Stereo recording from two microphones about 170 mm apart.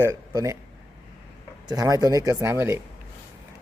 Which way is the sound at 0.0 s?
20° right (ahead or behind).